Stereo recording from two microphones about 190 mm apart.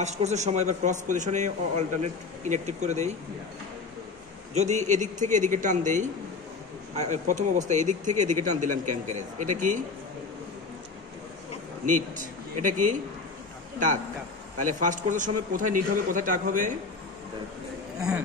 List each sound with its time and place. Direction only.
0.0 s speech: 35° right (ahead or behind)
4.6 s speech: 35° right (ahead or behind)
11.8 s a man's voice: 40° right (ahead or behind)
14.6 s a man's voice: 45° right (ahead or behind)